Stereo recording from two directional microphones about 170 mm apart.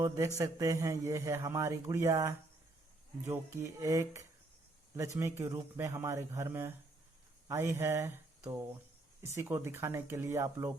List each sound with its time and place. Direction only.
0.3 s a man's voice: 20° right (ahead or behind)